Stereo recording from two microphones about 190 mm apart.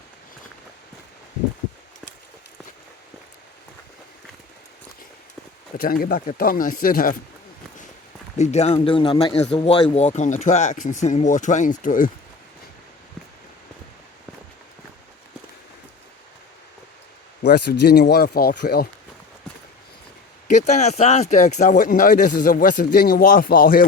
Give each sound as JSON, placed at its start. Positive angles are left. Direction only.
{"t": 5.7, "sound": "speech", "side_deg": 50}
{"t": 8.4, "sound": "speech", "side_deg": 35}
{"t": 17.4, "sound": "speech", "side_deg": 65}
{"t": 20.5, "sound": "speech", "side_deg": 40}